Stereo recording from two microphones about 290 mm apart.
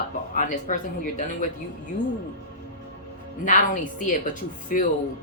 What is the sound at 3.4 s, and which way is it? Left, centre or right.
Speech, left.